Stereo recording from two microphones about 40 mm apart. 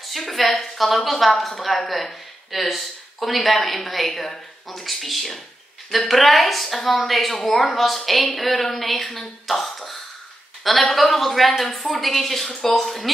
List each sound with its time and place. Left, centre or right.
0.3 s a woman's voice: centre
9.5 s a sound: centre
10.6 s a woman's voice: centre